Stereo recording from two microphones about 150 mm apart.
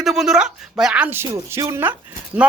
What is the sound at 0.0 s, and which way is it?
Speech, centre (ahead or behind).